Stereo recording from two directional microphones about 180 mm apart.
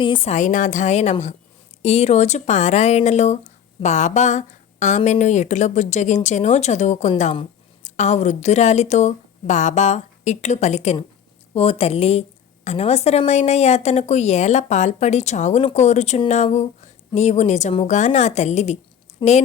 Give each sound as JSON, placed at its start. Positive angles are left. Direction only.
{"t": 0.0, "sound": "speech", "side_deg": 30}
{"t": 19.2, "sound": "a woman's voice", "side_deg": 25}